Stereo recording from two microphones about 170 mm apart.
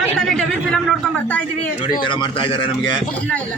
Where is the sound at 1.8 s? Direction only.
30° left (ahead or behind).